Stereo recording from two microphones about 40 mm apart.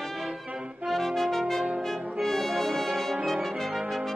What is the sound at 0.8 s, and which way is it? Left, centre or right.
Brass instrument, centre.